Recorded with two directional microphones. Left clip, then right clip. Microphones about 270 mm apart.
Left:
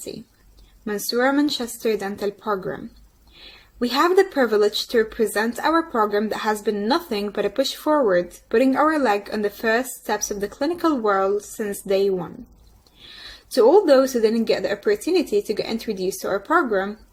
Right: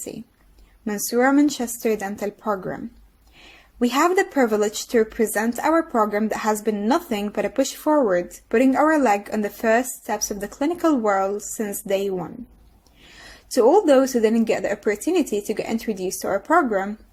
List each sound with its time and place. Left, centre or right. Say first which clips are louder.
0.9 s a woman's voice: right 1 dB; right
13.5 s a woman's voice: left 1 dB; right